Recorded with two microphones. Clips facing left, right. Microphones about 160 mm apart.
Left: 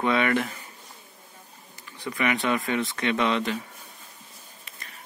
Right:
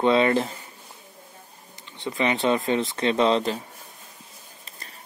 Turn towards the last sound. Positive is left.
turn(degrees=-30)  # may be behind; listen again after turning